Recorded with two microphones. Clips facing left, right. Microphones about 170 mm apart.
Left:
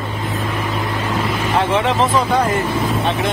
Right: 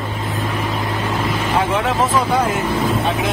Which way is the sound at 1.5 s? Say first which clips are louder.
Left 2 dB; centre (ahead or behind).